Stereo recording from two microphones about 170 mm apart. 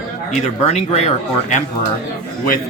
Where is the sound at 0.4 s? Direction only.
40° left (ahead or behind).